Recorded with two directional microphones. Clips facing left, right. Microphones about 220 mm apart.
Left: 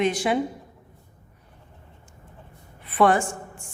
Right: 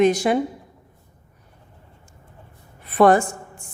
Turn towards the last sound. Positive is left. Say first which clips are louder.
# right 5 dB
turn(degrees=-40)  # may be behind; listen again after turning